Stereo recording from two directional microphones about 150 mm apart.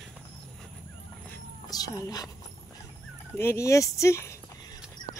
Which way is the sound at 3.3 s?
15° left (ahead or behind).